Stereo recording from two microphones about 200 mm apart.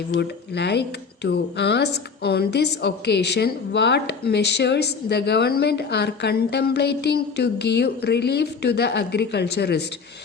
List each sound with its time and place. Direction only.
0.1 s speech: 60° left (ahead or behind)